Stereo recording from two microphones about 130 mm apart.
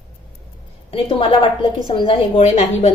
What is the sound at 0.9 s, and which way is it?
A woman's voice, 45° left (ahead or behind).